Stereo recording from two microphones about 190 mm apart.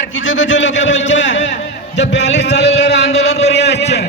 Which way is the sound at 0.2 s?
85° left.